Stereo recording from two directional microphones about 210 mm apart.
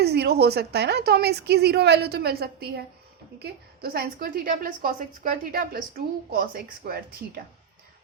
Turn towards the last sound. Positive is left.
turn(degrees=-45)  # may be behind; listen again after turning